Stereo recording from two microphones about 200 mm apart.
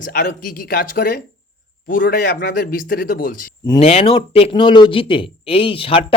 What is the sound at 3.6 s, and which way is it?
Speech, 25° left (ahead or behind).